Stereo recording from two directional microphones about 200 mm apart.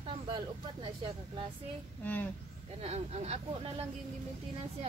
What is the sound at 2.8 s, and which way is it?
Speech, 35° right (ahead or behind).